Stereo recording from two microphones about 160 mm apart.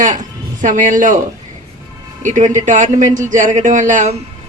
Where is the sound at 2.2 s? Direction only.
50° right (ahead or behind).